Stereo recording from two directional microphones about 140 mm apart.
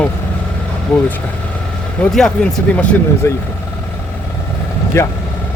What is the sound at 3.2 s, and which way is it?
Speech, 20° left (ahead or behind).